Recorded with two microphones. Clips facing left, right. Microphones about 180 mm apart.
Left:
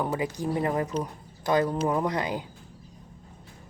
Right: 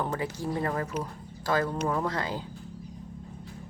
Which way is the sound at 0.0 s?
15° left (ahead or behind).